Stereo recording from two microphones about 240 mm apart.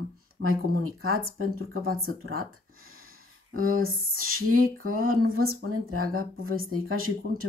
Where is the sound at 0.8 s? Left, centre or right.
Right.